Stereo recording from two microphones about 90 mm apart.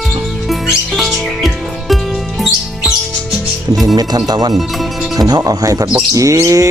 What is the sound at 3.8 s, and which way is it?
Speech, 50° right (ahead or behind).